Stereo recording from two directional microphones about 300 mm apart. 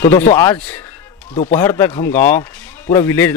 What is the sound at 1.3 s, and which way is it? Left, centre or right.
Speech, centre.